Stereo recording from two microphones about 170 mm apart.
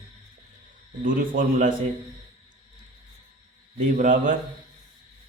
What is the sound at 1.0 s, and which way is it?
Speech, 55° right (ahead or behind).